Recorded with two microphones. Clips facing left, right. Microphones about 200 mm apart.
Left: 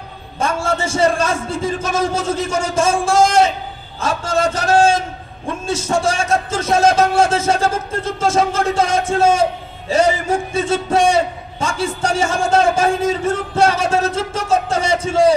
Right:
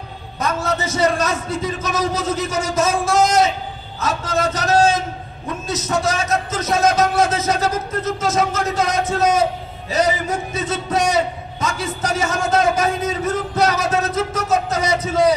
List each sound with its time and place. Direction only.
0.4 s a man's voice: 30° left (ahead or behind)